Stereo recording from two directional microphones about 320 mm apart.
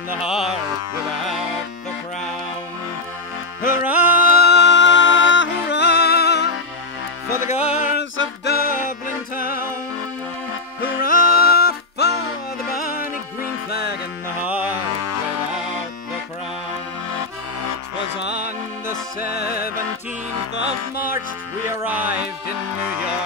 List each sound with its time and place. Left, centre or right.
0.1 s music: centre
3.8 s music: centre
4.2 s music: left
10.8 s music: left
13.7 s music: left
18.1 s music: left
21.6 s music: centre